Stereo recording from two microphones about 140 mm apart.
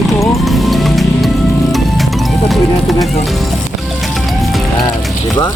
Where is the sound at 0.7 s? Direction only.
Centre (ahead or behind).